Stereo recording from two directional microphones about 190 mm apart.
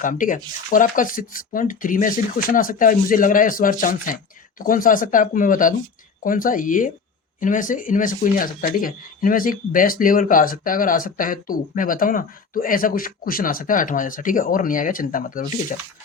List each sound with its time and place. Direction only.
0.0 s speech: 45° left (ahead or behind)